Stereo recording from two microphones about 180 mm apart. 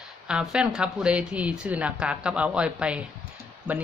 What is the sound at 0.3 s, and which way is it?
Speech, 5° right (ahead or behind).